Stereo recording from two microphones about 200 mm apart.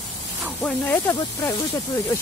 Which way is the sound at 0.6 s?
5° left (ahead or behind).